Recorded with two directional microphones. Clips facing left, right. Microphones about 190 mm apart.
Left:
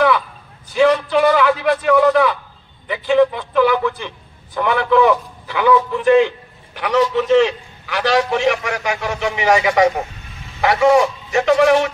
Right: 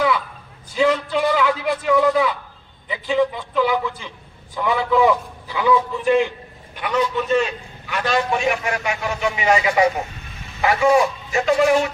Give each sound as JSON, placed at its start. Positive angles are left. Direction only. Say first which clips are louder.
{"t": 0.7, "sound": "a man's voice", "louder": "left 5 dB", "side_deg": 70}